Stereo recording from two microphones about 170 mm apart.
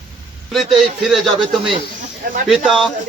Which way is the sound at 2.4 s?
Centre (ahead or behind).